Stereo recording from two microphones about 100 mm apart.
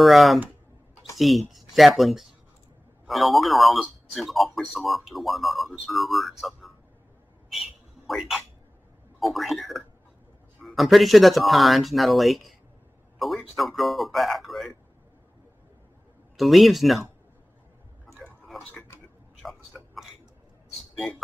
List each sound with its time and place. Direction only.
0.0 s speech: centre (ahead or behind)
8.1 s speech: centre (ahead or behind)
16.3 s speech: centre (ahead or behind)
18.1 s a sound: centre (ahead or behind)